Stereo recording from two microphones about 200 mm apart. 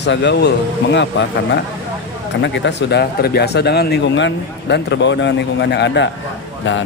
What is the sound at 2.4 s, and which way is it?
Speech, 60° left (ahead or behind).